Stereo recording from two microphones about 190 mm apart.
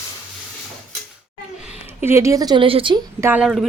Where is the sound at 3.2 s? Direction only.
5° right (ahead or behind).